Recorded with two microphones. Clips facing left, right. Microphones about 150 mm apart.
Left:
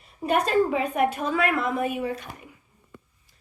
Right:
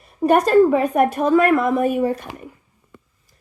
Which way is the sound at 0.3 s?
45° right (ahead or behind).